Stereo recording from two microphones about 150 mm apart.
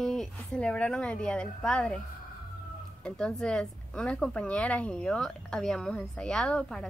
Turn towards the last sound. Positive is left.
turn(degrees=5)  # may be behind; listen again after turning